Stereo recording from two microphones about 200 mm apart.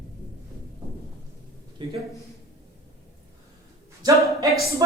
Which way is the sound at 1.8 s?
25° right (ahead or behind).